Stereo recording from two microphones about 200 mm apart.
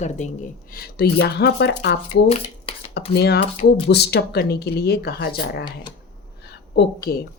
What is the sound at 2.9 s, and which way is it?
A woman's voice, 55° left (ahead or behind).